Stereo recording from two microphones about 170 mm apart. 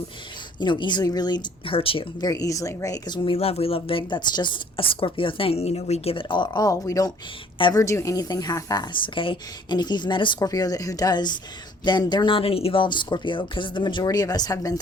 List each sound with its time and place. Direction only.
0.6 s a woman's voice: 25° left (ahead or behind)
2.3 s a woman's voice: 20° left (ahead or behind)